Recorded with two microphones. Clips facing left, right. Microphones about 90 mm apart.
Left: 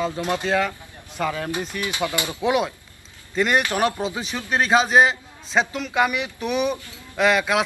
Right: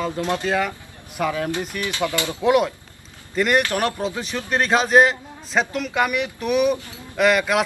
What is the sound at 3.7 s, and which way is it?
Speech, 5° left (ahead or behind).